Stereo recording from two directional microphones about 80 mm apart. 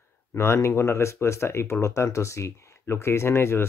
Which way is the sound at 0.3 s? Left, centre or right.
Left.